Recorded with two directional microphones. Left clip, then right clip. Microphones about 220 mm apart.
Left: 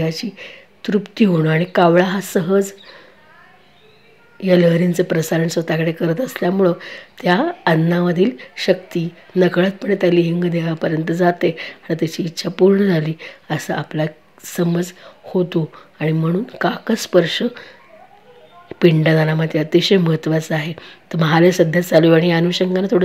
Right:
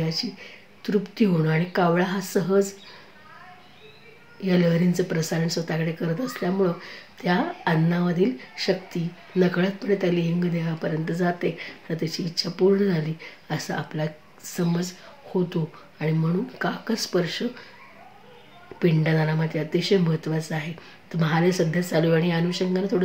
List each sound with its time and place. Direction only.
0.0 s speech: 35° left (ahead or behind)
4.4 s speech: 35° left (ahead or behind)
18.8 s speech: 35° left (ahead or behind)